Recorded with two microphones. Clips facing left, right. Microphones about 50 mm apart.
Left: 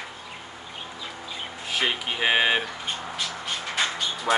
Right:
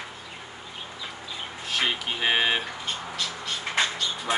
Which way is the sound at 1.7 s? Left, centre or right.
Centre.